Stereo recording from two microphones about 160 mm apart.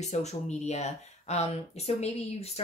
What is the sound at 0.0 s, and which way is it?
Speech, 45° left (ahead or behind).